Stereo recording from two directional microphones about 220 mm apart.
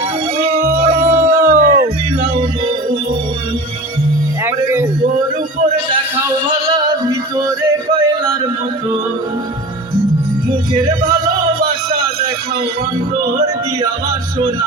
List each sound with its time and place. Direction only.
0.4 s music: 35° right (ahead or behind)
4.4 s a sound: 15° right (ahead or behind)
6.7 s music: 15° right (ahead or behind)
10.8 s music: 25° right (ahead or behind)